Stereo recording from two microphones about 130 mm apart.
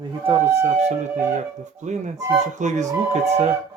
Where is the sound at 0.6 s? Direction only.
60° right (ahead or behind).